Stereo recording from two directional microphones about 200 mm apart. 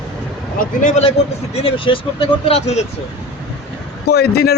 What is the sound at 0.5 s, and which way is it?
Speech, 40° left (ahead or behind).